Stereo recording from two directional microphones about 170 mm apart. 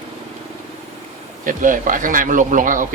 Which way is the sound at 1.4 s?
50° right (ahead or behind).